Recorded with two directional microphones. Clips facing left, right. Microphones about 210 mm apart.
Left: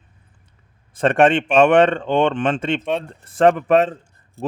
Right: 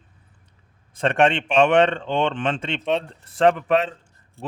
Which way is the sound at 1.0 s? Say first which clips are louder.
Left 4 dB; 50° left (ahead or behind).